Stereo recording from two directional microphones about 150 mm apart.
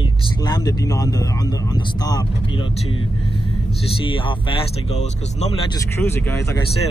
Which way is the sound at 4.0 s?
35° left (ahead or behind).